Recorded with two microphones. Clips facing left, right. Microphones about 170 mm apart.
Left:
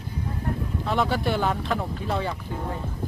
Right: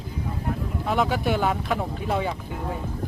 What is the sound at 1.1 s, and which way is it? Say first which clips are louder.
Speech: right 1 dB; 10° right (ahead or behind).